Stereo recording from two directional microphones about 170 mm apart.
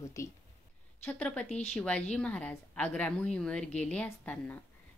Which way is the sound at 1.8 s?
10° left (ahead or behind).